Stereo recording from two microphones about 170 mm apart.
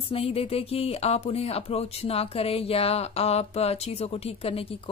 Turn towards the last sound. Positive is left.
turn(degrees=35)  # may be behind; listen again after turning